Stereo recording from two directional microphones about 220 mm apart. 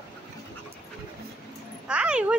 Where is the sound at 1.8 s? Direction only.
5° right (ahead or behind).